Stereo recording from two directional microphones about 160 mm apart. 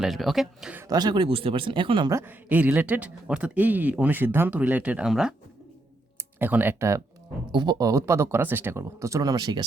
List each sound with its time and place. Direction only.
0.0 s speech: centre (ahead or behind)
0.9 s speech: 25° right (ahead or behind)
2.1 s speech: 10° right (ahead or behind)
6.4 s speech: 10° right (ahead or behind)